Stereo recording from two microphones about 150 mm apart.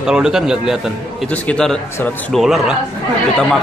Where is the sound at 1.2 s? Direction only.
10° left (ahead or behind).